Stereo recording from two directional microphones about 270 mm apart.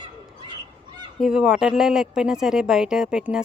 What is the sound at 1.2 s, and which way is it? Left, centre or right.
A woman's voice, centre.